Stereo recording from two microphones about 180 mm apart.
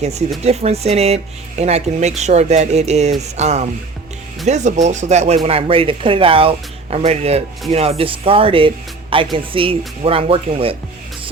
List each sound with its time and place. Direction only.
0.0 s speech: 35° right (ahead or behind)